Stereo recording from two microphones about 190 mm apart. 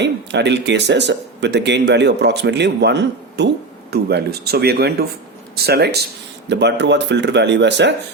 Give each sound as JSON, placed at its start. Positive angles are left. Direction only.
{"t": 0.0, "sound": "speech", "side_deg": -65}